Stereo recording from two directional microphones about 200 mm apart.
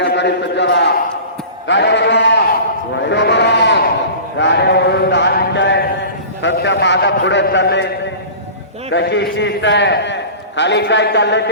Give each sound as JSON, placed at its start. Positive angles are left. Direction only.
{"t": 0.0, "sound": "a man's voice", "side_deg": 60}
{"t": 1.6, "sound": "sheep", "side_deg": 60}
{"t": 4.4, "sound": "a sound", "side_deg": 60}
{"t": 6.4, "sound": "a man's voice", "side_deg": 65}
{"t": 8.9, "sound": "a man's voice", "side_deg": 60}